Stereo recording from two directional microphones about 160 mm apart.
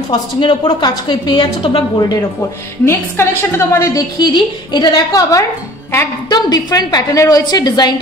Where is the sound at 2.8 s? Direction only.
15° left (ahead or behind).